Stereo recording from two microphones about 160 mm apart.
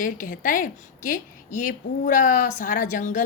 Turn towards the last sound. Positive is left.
turn(degrees=55)  # may be behind; listen again after turning